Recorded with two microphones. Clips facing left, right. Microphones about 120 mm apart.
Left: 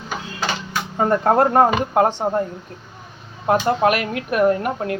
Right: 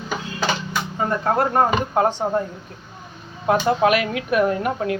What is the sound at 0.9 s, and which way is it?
Speech, 40° left (ahead or behind).